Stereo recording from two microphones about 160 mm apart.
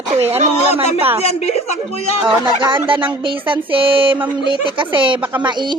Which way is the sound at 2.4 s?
25° right (ahead or behind).